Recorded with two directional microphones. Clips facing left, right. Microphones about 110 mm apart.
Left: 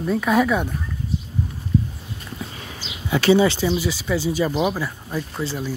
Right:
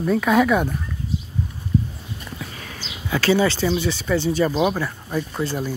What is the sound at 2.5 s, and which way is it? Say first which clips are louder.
Speech: even; 25° left (ahead or behind).